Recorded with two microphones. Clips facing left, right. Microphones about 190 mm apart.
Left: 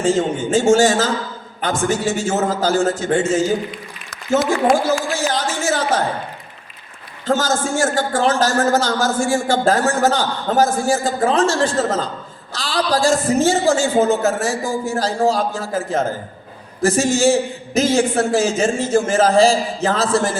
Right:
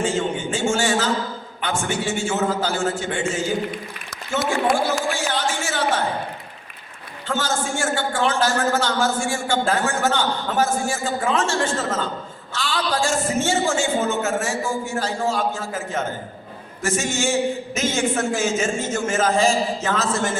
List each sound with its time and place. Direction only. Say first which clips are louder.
0.0 s a man's voice: left 5 dB; 40° left (ahead or behind)
7.3 s a man's voice: left 6 dB; 40° left (ahead or behind)